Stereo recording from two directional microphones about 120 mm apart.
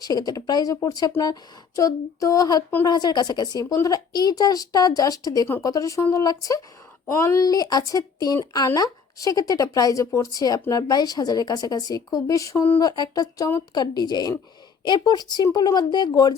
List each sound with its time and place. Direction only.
0.0 s speech: 35° left (ahead or behind)
12.8 s speech: 35° left (ahead or behind)